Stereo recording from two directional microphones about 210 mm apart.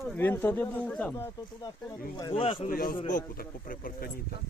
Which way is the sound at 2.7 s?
40° left (ahead or behind).